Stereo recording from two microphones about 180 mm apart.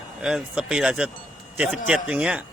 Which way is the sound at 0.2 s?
5° right (ahead or behind).